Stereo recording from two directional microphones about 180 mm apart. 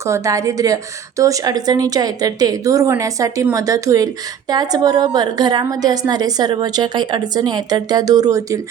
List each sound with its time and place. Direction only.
0.0 s a woman's voice: 15° right (ahead or behind)